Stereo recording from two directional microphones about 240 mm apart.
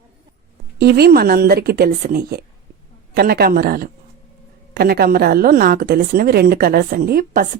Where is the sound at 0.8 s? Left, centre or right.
Right.